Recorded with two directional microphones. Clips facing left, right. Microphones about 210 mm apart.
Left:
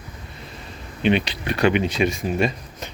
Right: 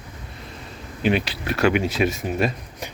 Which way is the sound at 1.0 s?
5° right (ahead or behind).